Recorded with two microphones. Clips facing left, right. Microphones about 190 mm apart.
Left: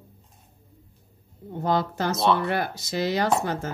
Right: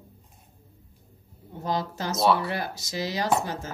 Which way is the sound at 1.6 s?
60° left (ahead or behind).